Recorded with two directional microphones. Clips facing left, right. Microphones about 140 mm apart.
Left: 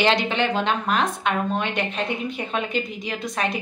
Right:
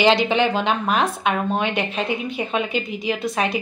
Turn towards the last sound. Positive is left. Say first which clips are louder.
# right 4 dB
turn(degrees=-5)  # may be behind; listen again after turning